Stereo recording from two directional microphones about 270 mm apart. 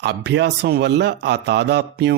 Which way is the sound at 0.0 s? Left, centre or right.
Right.